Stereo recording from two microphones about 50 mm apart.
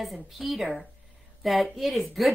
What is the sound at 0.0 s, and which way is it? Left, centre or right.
A woman's voice, centre.